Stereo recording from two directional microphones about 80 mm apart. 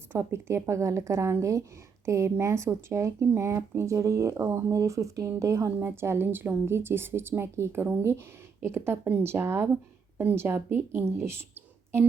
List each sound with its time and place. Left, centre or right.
0.1 s a woman's voice: right